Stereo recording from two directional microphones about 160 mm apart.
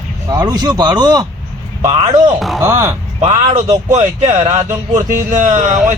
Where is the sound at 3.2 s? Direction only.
40° right (ahead or behind).